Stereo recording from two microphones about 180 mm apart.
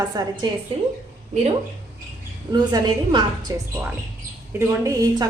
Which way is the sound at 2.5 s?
25° right (ahead or behind).